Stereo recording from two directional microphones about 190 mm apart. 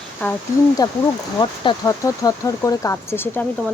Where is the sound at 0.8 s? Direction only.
20° left (ahead or behind).